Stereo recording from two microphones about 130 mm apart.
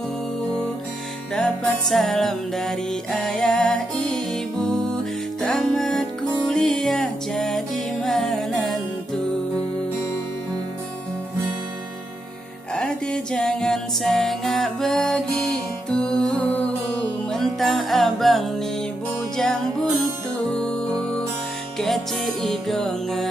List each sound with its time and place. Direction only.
1.3 s music: 5° left (ahead or behind)
12.7 s music: 5° left (ahead or behind)